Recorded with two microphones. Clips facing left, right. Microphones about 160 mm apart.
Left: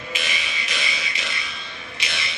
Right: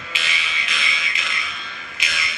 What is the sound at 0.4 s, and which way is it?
Fire alarm, 40° left (ahead or behind).